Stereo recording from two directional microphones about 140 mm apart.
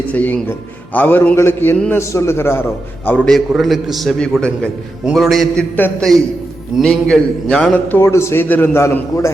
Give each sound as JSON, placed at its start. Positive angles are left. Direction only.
{"t": 0.1, "sound": "a man's voice", "side_deg": 10}
{"t": 5.7, "sound": "a man's voice", "side_deg": 10}